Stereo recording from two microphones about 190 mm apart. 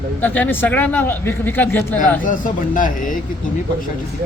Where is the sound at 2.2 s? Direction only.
45° left (ahead or behind).